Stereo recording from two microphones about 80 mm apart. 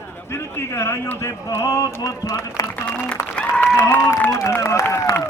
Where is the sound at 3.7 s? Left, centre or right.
Left.